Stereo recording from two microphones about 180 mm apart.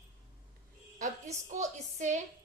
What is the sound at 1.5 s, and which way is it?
Speech, 40° right (ahead or behind).